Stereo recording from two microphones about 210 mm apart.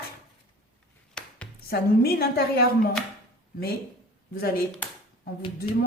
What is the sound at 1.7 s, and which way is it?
A woman's voice, 50° left (ahead or behind).